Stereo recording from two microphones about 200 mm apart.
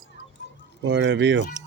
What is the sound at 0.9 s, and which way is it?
Speech, 65° right (ahead or behind).